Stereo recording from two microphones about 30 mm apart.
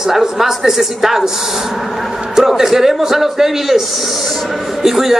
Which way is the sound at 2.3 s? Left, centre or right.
Centre.